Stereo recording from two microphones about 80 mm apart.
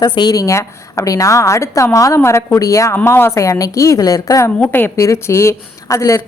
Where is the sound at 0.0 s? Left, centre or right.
Left.